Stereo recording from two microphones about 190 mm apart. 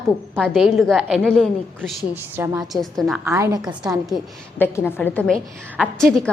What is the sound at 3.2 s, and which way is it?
Speech, 15° right (ahead or behind).